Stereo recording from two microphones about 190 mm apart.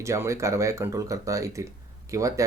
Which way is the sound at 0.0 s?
15° right (ahead or behind).